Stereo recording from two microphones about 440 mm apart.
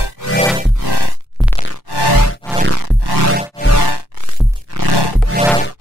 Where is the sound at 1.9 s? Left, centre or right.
Left.